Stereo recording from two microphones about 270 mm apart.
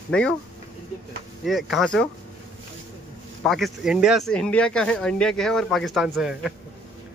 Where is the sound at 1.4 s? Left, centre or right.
Centre.